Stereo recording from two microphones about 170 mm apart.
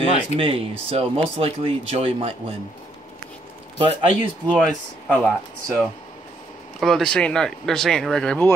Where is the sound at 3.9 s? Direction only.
35° right (ahead or behind).